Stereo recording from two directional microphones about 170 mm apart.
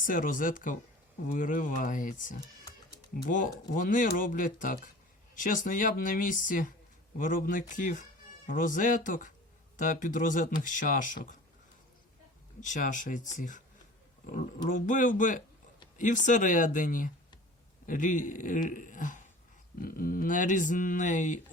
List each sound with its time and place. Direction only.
0.0 s speech: 55° left (ahead or behind)
12.5 s speech: 45° left (ahead or behind)